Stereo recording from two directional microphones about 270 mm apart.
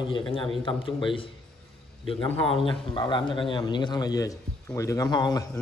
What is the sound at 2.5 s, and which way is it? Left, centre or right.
A man's voice, centre.